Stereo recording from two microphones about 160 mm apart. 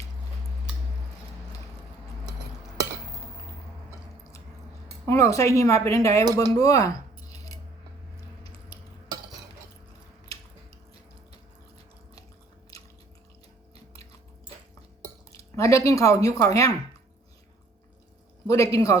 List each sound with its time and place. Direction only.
5.0 s speech: 20° left (ahead or behind)
7.3 s coin: 20° left (ahead or behind)
15.4 s speech: 20° left (ahead or behind)
18.4 s speech: 20° left (ahead or behind)